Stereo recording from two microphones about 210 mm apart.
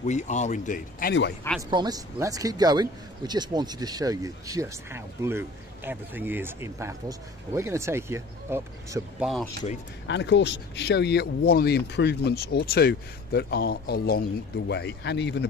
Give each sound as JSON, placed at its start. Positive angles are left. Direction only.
{"t": 0.0, "sound": "speech", "side_deg": 35}
{"t": 1.7, "sound": "speech", "side_deg": -20}
{"t": 10.0, "sound": "speech", "side_deg": 55}